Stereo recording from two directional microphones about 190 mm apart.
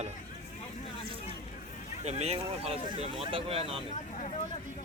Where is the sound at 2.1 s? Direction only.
35° right (ahead or behind).